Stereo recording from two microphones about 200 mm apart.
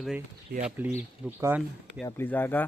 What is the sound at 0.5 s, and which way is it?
Speech, 55° right (ahead or behind).